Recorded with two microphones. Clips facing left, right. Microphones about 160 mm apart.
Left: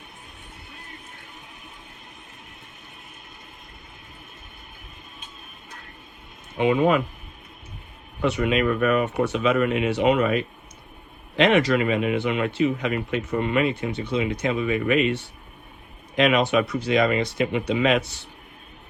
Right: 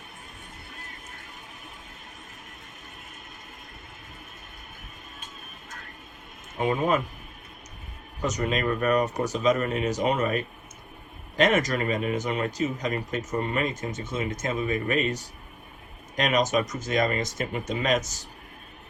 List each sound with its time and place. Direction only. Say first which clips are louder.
8.2 s speech: left 5 dB; 40° right (ahead or behind)